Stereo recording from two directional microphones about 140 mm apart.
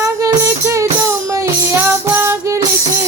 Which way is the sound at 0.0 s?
25° right (ahead or behind).